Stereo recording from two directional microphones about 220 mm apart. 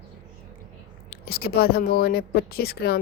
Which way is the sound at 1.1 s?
45° left (ahead or behind).